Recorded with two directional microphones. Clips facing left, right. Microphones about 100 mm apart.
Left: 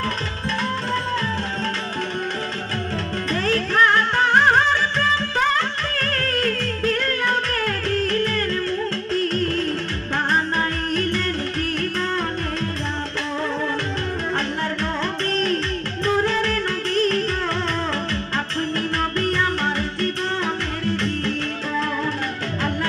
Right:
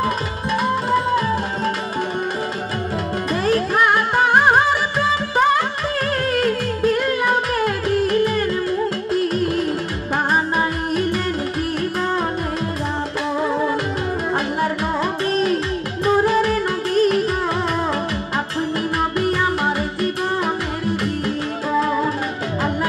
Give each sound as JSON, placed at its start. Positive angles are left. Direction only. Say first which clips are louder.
{"t": 0.0, "sound": "music", "louder": "right 4 dB", "side_deg": -10}
{"t": 3.4, "sound": "music", "louder": "right 2 dB", "side_deg": -15}
{"t": 14.6, "sound": "music", "louder": "right 4 dB", "side_deg": -10}
{"t": 18.9, "sound": "music", "louder": "right 3 dB", "side_deg": -10}
{"t": 21.7, "sound": "music", "louder": "right 6 dB", "side_deg": -20}